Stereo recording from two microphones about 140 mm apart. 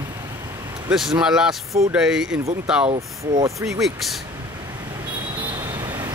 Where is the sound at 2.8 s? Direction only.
45° right (ahead or behind).